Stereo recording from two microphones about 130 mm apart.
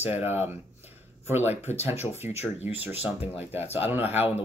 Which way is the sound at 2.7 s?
15° right (ahead or behind).